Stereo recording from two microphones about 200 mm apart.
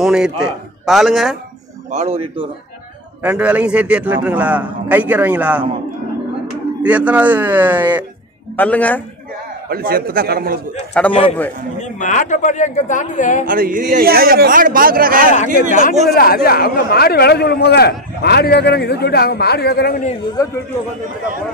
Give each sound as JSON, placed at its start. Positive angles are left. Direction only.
{"t": 0.0, "sound": "a man's voice", "side_deg": -5}
{"t": 1.9, "sound": "speech", "side_deg": -30}
{"t": 3.2, "sound": "a man's voice", "side_deg": -5}
{"t": 6.8, "sound": "a man's voice", "side_deg": -5}
{"t": 8.5, "sound": "a man's voice", "side_deg": 10}
{"t": 9.7, "sound": "a man's voice", "side_deg": -50}
{"t": 10.9, "sound": "a man's voice", "side_deg": 5}
{"t": 12.0, "sound": "speech", "side_deg": 40}
{"t": 13.5, "sound": "a man's voice", "side_deg": -45}
{"t": 16.2, "sound": "speech", "side_deg": 45}
{"t": 20.4, "sound": "a man's voice", "side_deg": 15}